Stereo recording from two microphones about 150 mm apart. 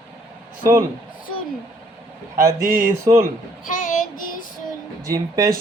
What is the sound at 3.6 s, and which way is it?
Child singing, 60° left (ahead or behind).